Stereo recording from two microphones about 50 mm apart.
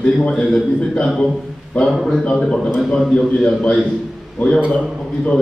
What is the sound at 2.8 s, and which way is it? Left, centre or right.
A man's voice, centre.